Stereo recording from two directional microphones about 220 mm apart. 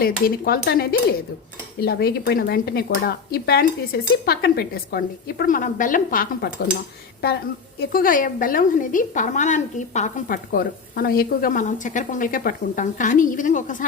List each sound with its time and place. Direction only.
0.0 s speech: 45° left (ahead or behind)
7.8 s a woman's voice: 40° left (ahead or behind)